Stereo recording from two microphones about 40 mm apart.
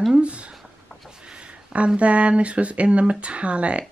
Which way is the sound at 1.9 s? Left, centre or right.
Right.